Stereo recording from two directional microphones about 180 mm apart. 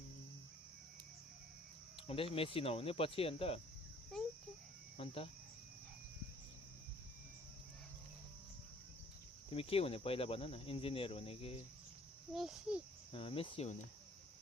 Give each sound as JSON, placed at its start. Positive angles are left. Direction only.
{"t": 2.0, "sound": "speech", "side_deg": 30}
{"t": 4.9, "sound": "speech", "side_deg": 30}
{"t": 9.5, "sound": "speech", "side_deg": 30}
{"t": 12.3, "sound": "a child's voice", "side_deg": 0}
{"t": 13.1, "sound": "speech", "side_deg": 30}